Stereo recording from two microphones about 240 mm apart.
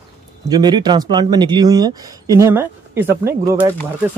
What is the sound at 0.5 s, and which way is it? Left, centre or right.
Speech, centre.